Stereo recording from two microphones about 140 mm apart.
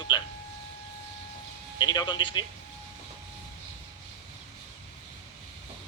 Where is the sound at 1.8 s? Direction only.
35° left (ahead or behind).